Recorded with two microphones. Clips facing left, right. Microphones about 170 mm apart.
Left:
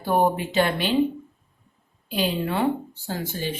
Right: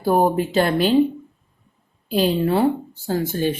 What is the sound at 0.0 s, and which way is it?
Speech, 40° right (ahead or behind).